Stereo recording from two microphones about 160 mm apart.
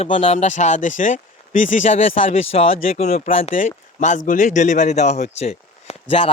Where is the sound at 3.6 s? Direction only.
50° left (ahead or behind).